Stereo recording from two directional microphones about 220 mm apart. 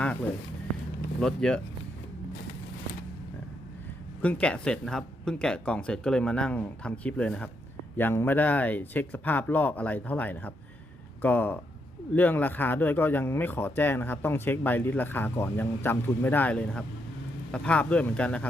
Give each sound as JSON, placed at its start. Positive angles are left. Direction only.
{"t": 1.2, "sound": "speech", "side_deg": 5}
{"t": 4.2, "sound": "speech", "side_deg": 5}